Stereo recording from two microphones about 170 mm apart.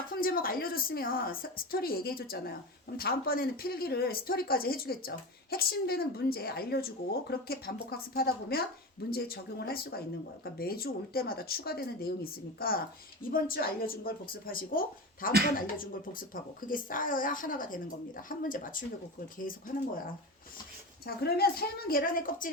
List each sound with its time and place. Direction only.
0.1 s a woman's voice: 60° left (ahead or behind)
21.2 s a woman's voice: 65° left (ahead or behind)